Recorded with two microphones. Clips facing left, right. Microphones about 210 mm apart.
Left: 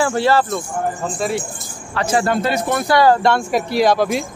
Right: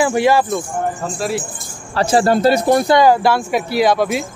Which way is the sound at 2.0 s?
30° right (ahead or behind).